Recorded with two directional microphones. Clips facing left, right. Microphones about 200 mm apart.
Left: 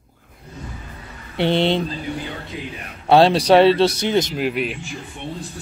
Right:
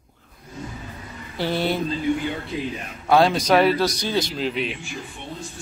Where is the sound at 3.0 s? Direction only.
30° left (ahead or behind).